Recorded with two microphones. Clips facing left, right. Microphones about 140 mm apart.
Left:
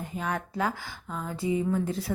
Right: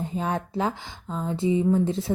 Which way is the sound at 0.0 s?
30° right (ahead or behind).